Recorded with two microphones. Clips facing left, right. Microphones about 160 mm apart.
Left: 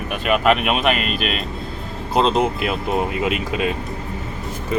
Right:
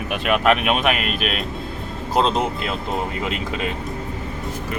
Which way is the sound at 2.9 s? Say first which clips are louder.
Left 5 dB; 15° left (ahead or behind).